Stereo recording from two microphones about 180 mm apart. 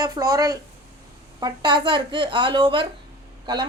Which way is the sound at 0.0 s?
20° right (ahead or behind).